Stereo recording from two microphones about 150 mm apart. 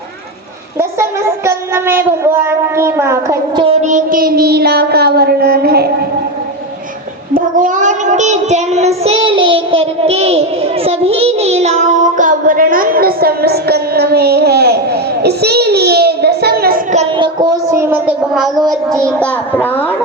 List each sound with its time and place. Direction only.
1.5 s speech: 15° right (ahead or behind)
3.5 s child singing: 35° right (ahead or behind)
3.8 s child singing: 55° right (ahead or behind); by 5.9 s 90° right
7.3 s child singing: 55° right (ahead or behind); by 16.8 s 90° right
17.2 s a sound: 30° right (ahead or behind); by 18.1 s 15° right (ahead or behind)
18.3 s speech: centre (ahead or behind)
19.0 s a child's voice: 10° left (ahead or behind)